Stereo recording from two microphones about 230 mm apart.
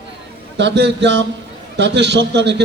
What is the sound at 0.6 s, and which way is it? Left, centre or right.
A man's voice, right.